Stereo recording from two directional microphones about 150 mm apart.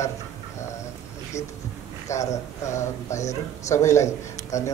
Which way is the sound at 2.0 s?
20° left (ahead or behind).